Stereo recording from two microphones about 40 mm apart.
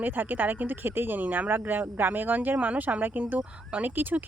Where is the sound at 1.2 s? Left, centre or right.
Right.